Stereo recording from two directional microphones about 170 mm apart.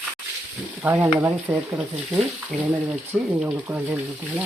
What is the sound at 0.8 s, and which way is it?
Speech, 10° right (ahead or behind).